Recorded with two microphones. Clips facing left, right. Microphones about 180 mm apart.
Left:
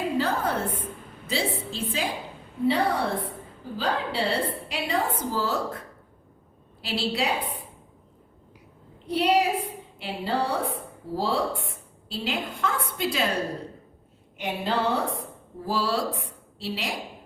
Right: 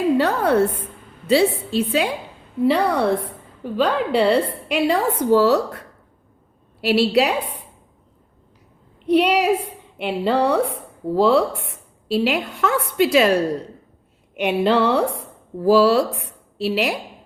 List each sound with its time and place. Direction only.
0.2 s a woman's voice: 70° right (ahead or behind)
6.8 s a woman's voice: 70° right (ahead or behind)
9.0 s a woman's voice: 70° right (ahead or behind)
14.3 s a woman's voice: 70° right (ahead or behind)